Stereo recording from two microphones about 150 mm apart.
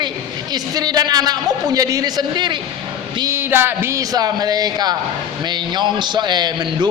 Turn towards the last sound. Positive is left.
turn(degrees=-30)  # may be behind; listen again after turning